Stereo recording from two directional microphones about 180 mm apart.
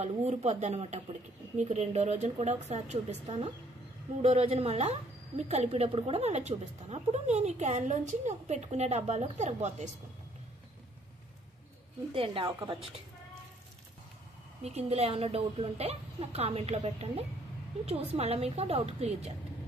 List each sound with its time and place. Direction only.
0.0 s a woman's voice: 35° right (ahead or behind)
12.1 s a woman's voice: 30° right (ahead or behind)
14.6 s a woman's voice: 35° right (ahead or behind)
18.1 s a woman's voice: 35° right (ahead or behind)